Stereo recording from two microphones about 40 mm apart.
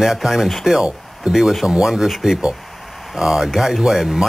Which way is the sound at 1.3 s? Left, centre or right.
Right.